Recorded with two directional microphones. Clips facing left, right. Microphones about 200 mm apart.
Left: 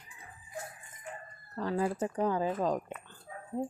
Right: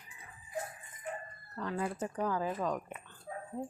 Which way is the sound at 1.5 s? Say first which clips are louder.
Left 5 dB; 30° left (ahead or behind).